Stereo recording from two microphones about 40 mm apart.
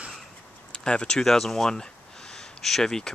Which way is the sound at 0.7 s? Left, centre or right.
Left.